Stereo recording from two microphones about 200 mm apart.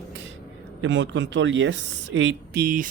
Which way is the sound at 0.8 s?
65° right (ahead or behind).